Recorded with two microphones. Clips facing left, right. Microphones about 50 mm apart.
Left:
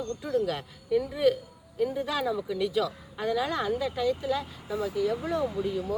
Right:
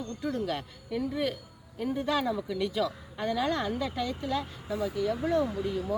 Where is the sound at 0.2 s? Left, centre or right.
Centre.